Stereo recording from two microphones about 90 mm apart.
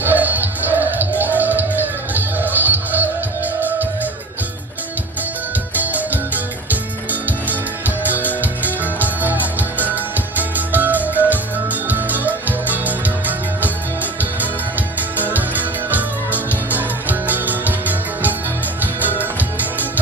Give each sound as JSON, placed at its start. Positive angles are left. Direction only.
{"t": 0.0, "sound": "music", "side_deg": -20}
{"t": 5.7, "sound": "music", "side_deg": -20}